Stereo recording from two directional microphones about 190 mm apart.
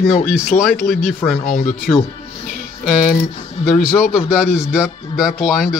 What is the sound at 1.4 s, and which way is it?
Speech, 45° left (ahead or behind).